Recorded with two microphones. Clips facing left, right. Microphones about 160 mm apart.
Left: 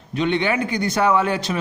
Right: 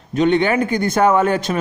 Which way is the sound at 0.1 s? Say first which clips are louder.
Right 5 dB; 45° right (ahead or behind).